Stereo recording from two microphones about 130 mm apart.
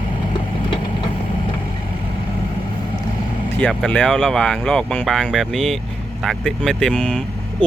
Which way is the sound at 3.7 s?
5° left (ahead or behind).